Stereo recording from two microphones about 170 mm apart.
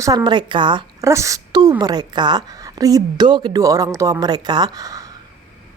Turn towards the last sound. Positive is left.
turn(degrees=-20)  # may be behind; listen again after turning